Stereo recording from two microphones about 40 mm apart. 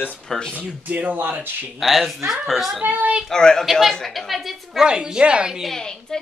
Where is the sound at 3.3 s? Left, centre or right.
Centre.